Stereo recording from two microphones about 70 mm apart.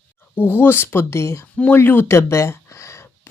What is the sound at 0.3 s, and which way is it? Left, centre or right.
Speech, left.